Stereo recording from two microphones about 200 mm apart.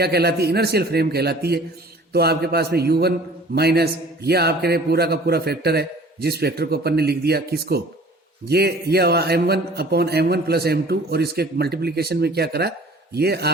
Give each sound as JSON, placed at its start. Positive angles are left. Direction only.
{"t": 0.0, "sound": "a man's voice", "side_deg": -55}